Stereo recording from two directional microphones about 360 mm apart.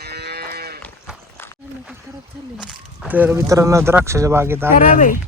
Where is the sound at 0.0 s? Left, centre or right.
Right.